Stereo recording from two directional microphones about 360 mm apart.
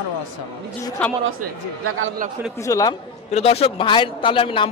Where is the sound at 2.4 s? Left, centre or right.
Centre.